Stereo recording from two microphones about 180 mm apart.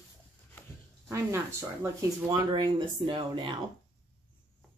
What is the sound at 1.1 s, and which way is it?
Speech, 15° right (ahead or behind).